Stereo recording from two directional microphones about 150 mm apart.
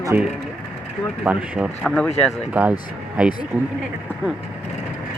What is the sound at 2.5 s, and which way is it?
Speech, 10° right (ahead or behind).